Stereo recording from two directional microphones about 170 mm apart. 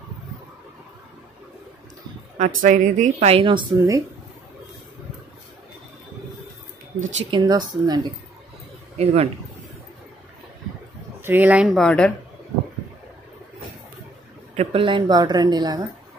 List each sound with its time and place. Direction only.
2.3 s speech: 45° right (ahead or behind); by 4.0 s 25° right (ahead or behind)
7.2 s a woman's voice: 25° right (ahead or behind)
8.9 s speech: 40° right (ahead or behind)
11.1 s speech: 10° right (ahead or behind); by 12.1 s 5° left (ahead or behind)
14.5 s a woman's voice: 35° right (ahead or behind)